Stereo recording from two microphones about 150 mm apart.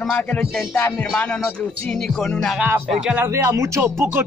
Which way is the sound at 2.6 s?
15° right (ahead or behind).